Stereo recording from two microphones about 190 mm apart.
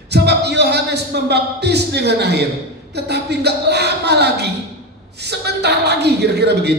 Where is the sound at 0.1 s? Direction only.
60° right (ahead or behind).